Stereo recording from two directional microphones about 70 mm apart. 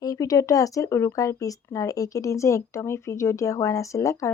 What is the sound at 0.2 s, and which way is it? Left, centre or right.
A woman's voice, left.